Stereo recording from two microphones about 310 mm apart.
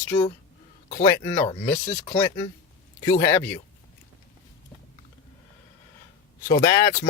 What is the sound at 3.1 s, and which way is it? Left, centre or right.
Speech, centre.